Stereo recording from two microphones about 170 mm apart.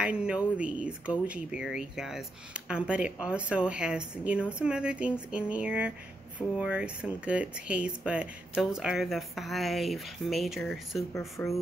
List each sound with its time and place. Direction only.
0.0 s speech: 5° right (ahead or behind)
11.1 s speech: 15° left (ahead or behind)